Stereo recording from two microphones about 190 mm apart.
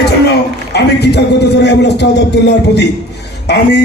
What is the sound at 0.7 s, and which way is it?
A man's voice, 60° left (ahead or behind).